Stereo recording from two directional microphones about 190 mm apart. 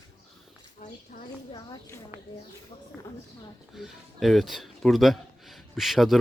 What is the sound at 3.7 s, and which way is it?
Speech, 5° right (ahead or behind).